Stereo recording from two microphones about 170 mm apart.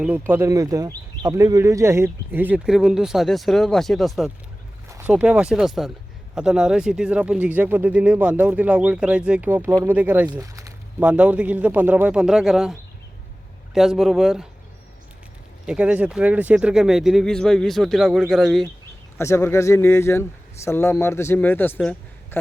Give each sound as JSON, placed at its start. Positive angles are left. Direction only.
{"t": 0.0, "sound": "speech", "side_deg": -10}
{"t": 4.9, "sound": "speech", "side_deg": -15}
{"t": 10.4, "sound": "a sound", "side_deg": -20}
{"t": 11.0, "sound": "speech", "side_deg": -10}
{"t": 13.7, "sound": "speech", "side_deg": 0}
{"t": 15.6, "sound": "speech", "side_deg": -5}
{"t": 19.1, "sound": "speech", "side_deg": 15}
{"t": 21.8, "sound": "a sound", "side_deg": 5}